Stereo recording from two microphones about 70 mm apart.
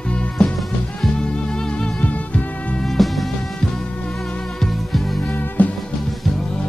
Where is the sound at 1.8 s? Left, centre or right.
Centre.